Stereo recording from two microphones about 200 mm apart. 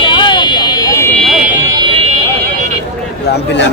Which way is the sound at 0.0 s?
25° left (ahead or behind).